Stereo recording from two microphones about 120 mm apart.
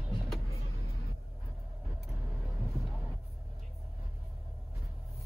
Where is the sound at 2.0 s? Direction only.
Centre (ahead or behind).